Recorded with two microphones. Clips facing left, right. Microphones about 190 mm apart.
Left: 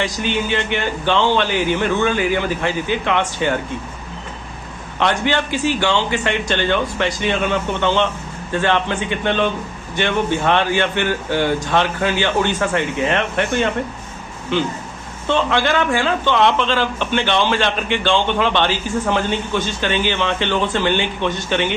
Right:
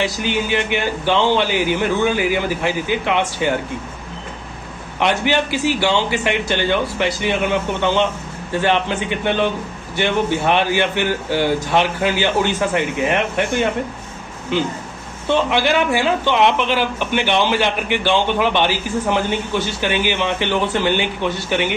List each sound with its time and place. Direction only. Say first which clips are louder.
0.0 s speech: even; 15° right (ahead or behind)
4.9 s speech: right 1 dB; 15° right (ahead or behind)